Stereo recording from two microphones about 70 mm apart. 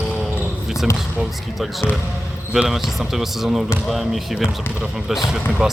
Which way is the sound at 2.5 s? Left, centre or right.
Centre.